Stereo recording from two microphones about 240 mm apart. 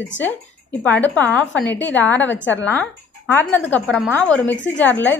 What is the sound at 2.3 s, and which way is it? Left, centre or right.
Speech, left.